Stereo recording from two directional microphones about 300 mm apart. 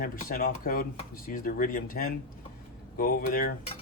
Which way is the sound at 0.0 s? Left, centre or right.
Left.